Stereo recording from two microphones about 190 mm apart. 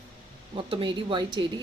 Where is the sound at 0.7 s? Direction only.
25° right (ahead or behind).